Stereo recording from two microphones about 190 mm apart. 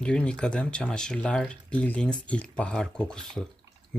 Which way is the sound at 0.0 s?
5° left (ahead or behind).